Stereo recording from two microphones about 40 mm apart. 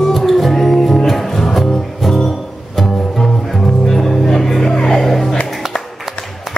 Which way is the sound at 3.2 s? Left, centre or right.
Centre.